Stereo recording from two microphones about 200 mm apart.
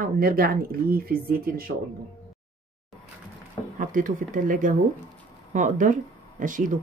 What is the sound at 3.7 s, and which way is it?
A woman's voice, 40° right (ahead or behind).